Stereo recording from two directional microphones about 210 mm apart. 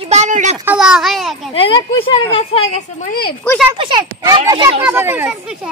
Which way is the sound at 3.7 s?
20° right (ahead or behind).